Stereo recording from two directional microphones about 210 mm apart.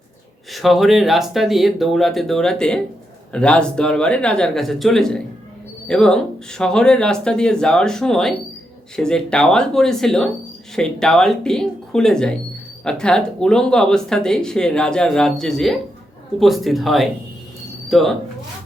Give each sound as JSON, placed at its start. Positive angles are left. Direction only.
{"t": 0.5, "sound": "speech", "side_deg": 0}